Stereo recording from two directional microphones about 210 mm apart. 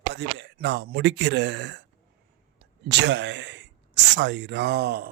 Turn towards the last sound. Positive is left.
turn(degrees=-50)  # may be behind; listen again after turning